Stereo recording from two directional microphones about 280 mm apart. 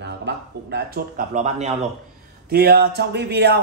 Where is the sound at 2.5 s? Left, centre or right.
Right.